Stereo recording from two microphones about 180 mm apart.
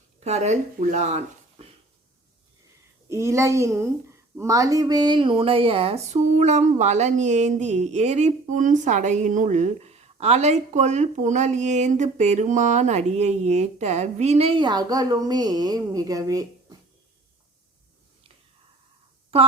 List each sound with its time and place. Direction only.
0.3 s speech: 40° right (ahead or behind)
3.1 s a child's voice: 15° right (ahead or behind)
19.3 s speech: 35° right (ahead or behind)